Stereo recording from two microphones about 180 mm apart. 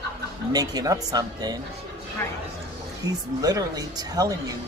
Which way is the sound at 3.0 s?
20° right (ahead or behind).